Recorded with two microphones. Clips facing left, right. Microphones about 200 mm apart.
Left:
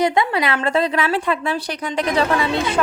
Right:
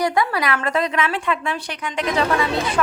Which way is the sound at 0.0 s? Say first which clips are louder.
Left 2 dB; 25° left (ahead or behind).